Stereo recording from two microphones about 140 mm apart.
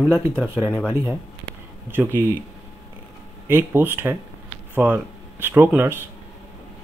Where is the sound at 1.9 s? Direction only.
15° right (ahead or behind).